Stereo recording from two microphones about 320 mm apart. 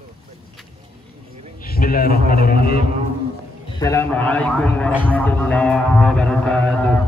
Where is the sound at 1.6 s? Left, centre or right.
Left.